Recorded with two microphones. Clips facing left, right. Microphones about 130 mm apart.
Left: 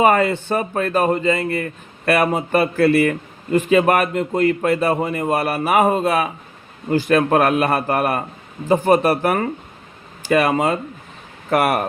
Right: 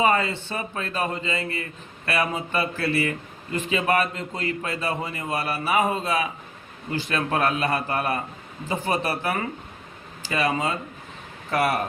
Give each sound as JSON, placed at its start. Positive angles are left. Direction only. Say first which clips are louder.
{"t": 0.0, "sound": "a man's voice", "louder": "left 7 dB", "side_deg": 55}
{"t": 8.6, "sound": "a man's voice", "louder": "left 11 dB", "side_deg": 50}
{"t": 11.5, "sound": "a man's voice", "louder": "left 6 dB", "side_deg": 60}